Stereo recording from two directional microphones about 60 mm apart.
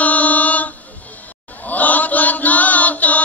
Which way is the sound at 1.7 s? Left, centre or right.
Left.